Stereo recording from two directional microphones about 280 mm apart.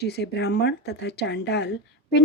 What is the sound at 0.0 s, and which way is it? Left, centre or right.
Speech, left.